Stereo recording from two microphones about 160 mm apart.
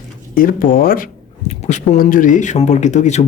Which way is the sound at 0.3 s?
60° left (ahead or behind).